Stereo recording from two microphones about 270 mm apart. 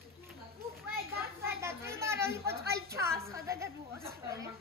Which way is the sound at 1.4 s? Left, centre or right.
Centre.